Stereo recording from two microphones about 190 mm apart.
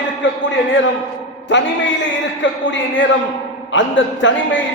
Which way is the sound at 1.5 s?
70° left (ahead or behind).